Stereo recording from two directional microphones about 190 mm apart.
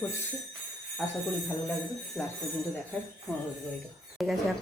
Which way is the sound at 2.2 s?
Centre (ahead or behind).